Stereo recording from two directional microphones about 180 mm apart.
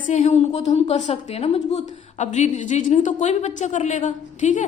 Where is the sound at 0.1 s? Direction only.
40° left (ahead or behind).